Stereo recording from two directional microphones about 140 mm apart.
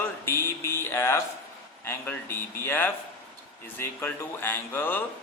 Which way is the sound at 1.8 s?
15° left (ahead or behind).